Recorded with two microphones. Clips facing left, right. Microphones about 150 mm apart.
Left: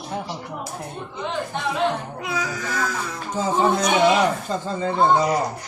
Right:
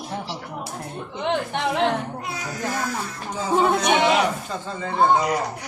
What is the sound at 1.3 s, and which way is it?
Speech, 75° right (ahead or behind).